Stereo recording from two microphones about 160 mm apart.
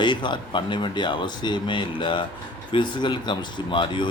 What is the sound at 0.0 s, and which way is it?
Speech, 30° left (ahead or behind).